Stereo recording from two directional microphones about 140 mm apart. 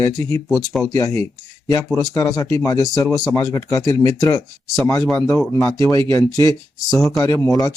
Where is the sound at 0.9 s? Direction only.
20° left (ahead or behind).